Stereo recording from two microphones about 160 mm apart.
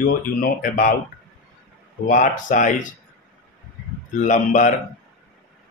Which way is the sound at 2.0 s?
55° left (ahead or behind).